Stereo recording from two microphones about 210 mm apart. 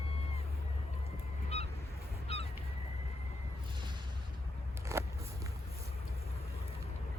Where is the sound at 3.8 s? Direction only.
20° right (ahead or behind).